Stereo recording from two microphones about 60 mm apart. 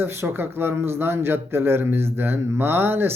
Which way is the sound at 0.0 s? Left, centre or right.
Right.